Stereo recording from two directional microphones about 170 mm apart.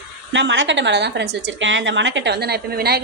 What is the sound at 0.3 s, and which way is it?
A woman's voice, 90° right.